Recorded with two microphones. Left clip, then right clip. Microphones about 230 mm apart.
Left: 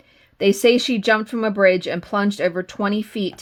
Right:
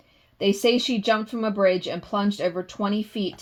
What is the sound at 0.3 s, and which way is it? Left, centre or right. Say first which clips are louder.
Speech: left 5 dB; left.